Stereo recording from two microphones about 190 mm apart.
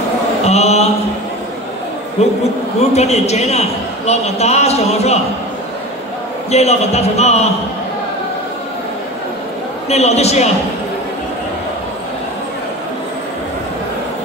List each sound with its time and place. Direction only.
0.5 s mantra: 35° left (ahead or behind)
2.2 s a man's voice: 35° left (ahead or behind)
6.5 s a man's voice: 35° left (ahead or behind)
9.8 s a man's voice: 35° left (ahead or behind)